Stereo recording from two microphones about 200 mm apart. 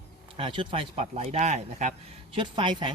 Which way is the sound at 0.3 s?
25° right (ahead or behind).